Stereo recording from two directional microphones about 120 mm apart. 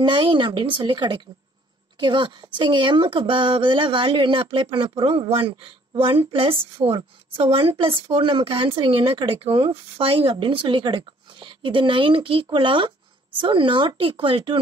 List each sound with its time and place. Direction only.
0.0 s speech: 45° right (ahead or behind)